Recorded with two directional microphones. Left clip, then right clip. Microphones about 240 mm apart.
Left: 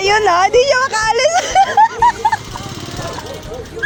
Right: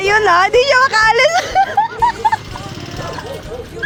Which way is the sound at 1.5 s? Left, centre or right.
Centre.